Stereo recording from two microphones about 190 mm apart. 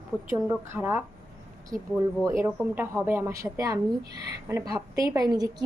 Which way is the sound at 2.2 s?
15° right (ahead or behind).